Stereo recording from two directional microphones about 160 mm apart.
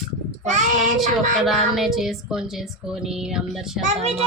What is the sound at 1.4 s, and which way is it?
Music, centre (ahead or behind).